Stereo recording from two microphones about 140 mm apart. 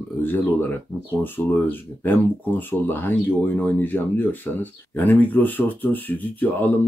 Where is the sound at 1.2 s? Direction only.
15° left (ahead or behind).